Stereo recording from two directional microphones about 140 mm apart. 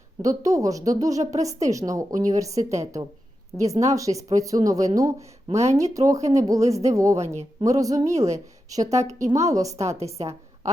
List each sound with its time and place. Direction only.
0.2 s speech: 25° right (ahead or behind)